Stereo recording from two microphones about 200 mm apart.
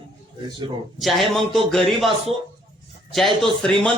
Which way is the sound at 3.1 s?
Centre (ahead or behind).